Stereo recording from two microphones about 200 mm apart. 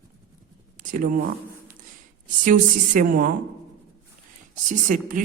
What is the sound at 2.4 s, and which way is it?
Speech, 40° right (ahead or behind).